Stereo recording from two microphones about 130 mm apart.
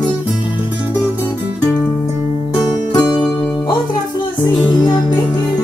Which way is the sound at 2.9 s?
35° left (ahead or behind).